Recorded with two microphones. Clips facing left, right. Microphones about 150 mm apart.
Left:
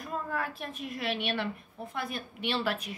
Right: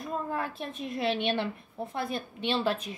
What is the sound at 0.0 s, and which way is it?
A woman's voice, 25° right (ahead or behind).